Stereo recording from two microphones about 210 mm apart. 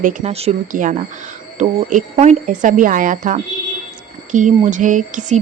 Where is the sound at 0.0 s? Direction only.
35° right (ahead or behind).